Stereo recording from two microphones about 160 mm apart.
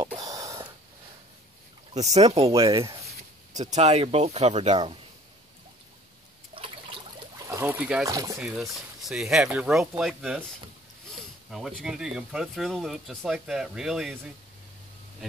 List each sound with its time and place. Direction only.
0.2 s a sound: 20° right (ahead or behind)
2.0 s speech: 45° right (ahead or behind)
6.5 s a sound: 35° right (ahead or behind)
7.4 s speech: 15° right (ahead or behind)
8.0 s speech: 20° right (ahead or behind)
8.4 s speech: centre (ahead or behind)
11.5 s speech: 5° right (ahead or behind)